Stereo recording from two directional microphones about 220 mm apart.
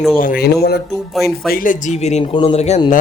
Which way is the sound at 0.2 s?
40° left (ahead or behind).